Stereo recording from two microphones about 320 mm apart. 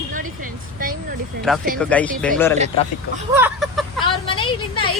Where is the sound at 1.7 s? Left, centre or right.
Centre.